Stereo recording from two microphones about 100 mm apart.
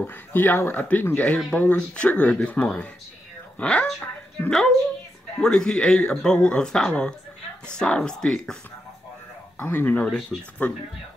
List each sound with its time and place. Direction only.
0.0 s speech: 20° left (ahead or behind)
9.6 s speech: 15° left (ahead or behind)